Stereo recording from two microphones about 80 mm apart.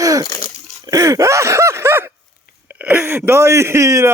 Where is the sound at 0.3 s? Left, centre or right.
Left.